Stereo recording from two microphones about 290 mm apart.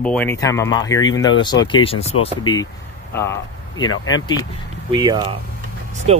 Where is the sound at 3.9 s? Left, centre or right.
Left.